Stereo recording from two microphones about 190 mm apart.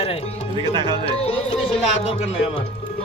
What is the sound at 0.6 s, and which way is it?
Speech, 25° right (ahead or behind).